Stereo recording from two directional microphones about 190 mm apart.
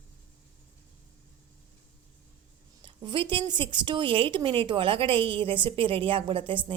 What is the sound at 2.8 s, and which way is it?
A woman's voice, 25° right (ahead or behind).